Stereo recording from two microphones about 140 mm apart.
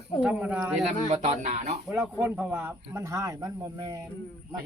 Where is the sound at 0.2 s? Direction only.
10° right (ahead or behind).